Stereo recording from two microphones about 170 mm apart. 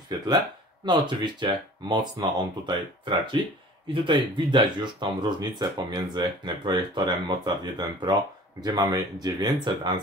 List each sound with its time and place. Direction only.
0.8 s speech: 25° right (ahead or behind)